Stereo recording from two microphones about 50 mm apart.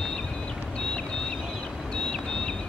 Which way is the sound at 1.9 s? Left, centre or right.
Centre.